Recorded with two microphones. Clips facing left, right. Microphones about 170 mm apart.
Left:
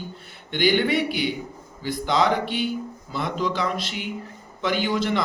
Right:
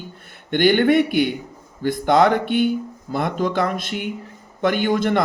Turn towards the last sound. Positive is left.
turn(degrees=-50)  # may be behind; listen again after turning